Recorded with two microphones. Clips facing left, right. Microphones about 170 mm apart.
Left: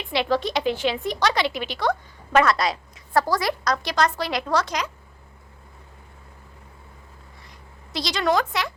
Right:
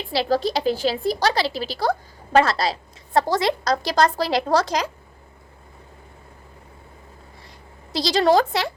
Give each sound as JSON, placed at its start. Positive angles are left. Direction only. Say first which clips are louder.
{"t": 0.0, "sound": "a woman's voice", "louder": "right 2 dB", "side_deg": -35}
{"t": 7.9, "sound": "a woman's voice", "louder": "right 5 dB", "side_deg": -30}